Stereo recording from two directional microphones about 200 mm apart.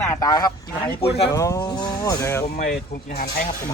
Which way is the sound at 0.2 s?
20° left (ahead or behind).